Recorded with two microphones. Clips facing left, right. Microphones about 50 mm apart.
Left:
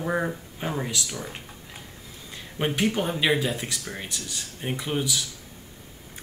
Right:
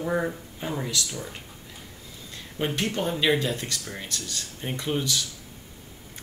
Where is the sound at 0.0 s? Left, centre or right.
Centre.